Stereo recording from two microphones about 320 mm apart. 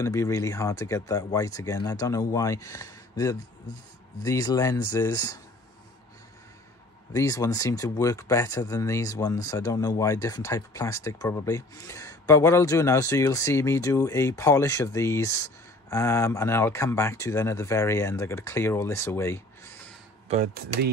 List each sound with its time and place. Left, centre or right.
0.0 s speech: centre
7.1 s speech: centre
20.2 s speech: right